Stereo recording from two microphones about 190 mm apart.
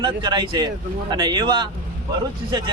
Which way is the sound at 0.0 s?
25° right (ahead or behind).